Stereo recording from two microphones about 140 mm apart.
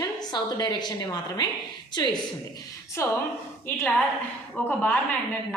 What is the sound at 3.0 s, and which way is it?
A woman's voice, 20° left (ahead or behind).